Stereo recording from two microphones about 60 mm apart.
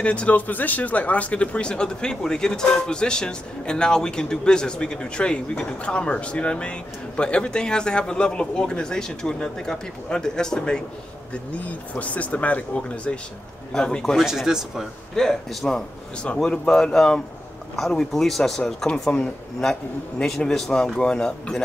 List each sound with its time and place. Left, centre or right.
0.0 s speech: left
11.3 s speech: left
14.2 s speech: centre
15.1 s speech: centre